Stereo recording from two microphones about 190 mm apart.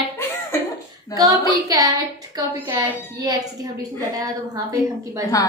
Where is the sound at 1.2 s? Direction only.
20° right (ahead or behind).